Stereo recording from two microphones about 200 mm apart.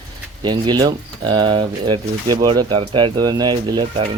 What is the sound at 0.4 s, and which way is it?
Speech, 20° right (ahead or behind).